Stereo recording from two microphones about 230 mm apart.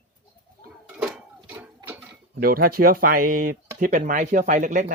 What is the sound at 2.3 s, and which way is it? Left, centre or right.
Speech, right.